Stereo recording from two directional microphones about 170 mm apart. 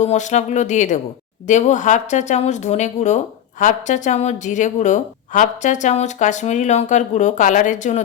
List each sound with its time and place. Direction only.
0.0 s a woman's voice: 45° left (ahead or behind)